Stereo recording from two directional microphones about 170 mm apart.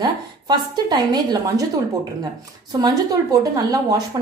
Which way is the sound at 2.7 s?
20° right (ahead or behind).